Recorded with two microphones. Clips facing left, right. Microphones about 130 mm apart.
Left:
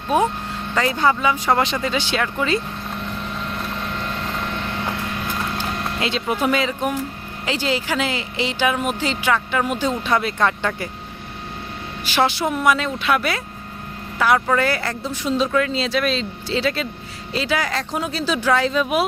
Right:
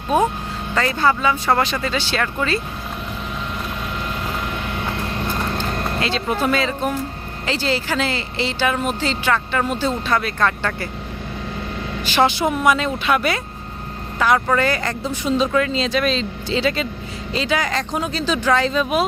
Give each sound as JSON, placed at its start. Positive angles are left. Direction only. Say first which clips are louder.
{"t": 0.8, "sound": "speech", "louder": "even", "side_deg": 15}
{"t": 6.0, "sound": "speech", "louder": "even", "side_deg": 15}
{"t": 12.1, "sound": "a man's voice", "louder": "right 2 dB", "side_deg": 0}